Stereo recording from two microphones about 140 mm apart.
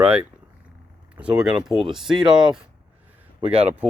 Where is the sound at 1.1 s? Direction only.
10° right (ahead or behind).